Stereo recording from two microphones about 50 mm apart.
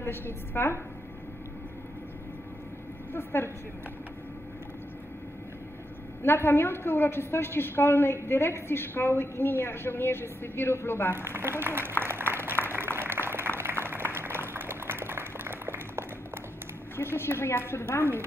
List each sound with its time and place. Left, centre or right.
0.0 s a woman's voice: left
3.1 s a woman's voice: left
6.2 s a woman's voice: left
11.1 s speech: right
12.0 s applause: right
12.6 s a sound: right
16.9 s a woman's voice: left